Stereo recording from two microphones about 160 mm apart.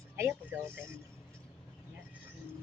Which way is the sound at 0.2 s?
15° right (ahead or behind).